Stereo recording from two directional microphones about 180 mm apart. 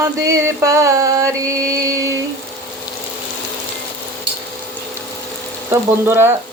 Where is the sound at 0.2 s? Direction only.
15° right (ahead or behind).